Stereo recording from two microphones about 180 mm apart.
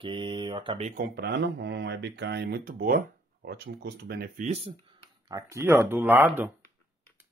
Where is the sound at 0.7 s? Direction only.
40° right (ahead or behind).